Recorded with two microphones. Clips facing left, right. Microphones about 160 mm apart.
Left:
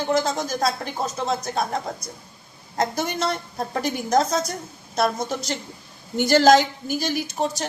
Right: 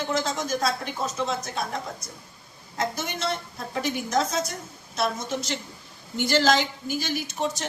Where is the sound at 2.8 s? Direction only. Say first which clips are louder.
Left 5 dB; 40° left (ahead or behind).